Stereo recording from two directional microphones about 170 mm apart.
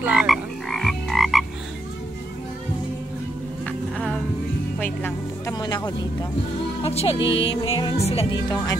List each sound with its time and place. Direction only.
0.0 s croak: 5° right (ahead or behind)
3.6 s music: 5° left (ahead or behind)
6.8 s speech: 35° left (ahead or behind)